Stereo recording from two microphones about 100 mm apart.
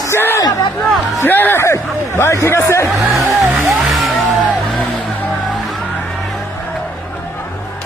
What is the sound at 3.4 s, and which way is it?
Music, 25° right (ahead or behind).